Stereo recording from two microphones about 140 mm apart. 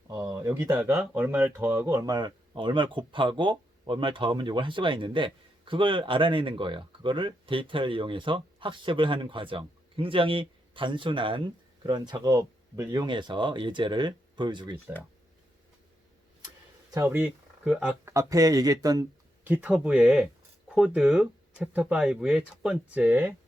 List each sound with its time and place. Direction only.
0.1 s a sound: 25° right (ahead or behind)
0.9 s speech: 15° right (ahead or behind); by 14.8 s 30° right (ahead or behind)
16.9 s speech: 20° right (ahead or behind)
18.0 s speech: 25° right (ahead or behind)
19.5 s speech: 10° right (ahead or behind)